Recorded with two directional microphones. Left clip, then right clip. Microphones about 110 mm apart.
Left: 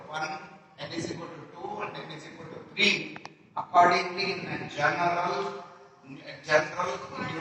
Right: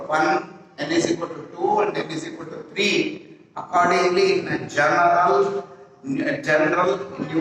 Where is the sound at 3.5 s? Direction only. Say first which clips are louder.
Right 2 dB; 25° right (ahead or behind).